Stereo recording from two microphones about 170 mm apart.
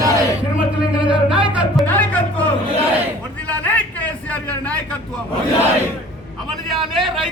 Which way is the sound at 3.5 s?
10° left (ahead or behind).